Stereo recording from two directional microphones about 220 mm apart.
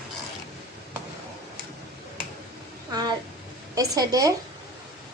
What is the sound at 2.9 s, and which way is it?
A woman's voice, 20° right (ahead or behind).